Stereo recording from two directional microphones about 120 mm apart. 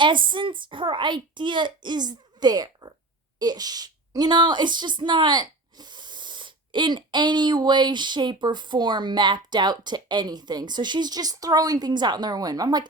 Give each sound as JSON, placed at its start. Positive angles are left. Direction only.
{"t": 0.0, "sound": "speech", "side_deg": -40}